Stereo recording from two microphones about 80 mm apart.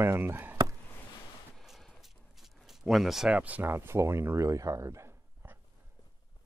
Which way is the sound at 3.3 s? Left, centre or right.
Centre.